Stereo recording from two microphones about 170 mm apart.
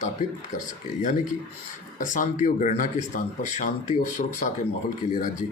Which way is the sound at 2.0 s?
50° left (ahead or behind).